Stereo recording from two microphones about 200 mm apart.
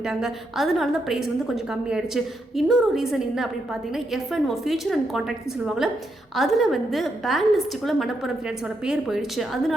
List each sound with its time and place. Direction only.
0.0 s a woman's voice: centre (ahead or behind)